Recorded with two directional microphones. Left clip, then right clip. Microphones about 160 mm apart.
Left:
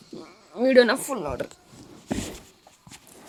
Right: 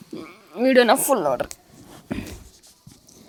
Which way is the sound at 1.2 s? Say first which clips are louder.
Right 8 dB; 15° right (ahead or behind).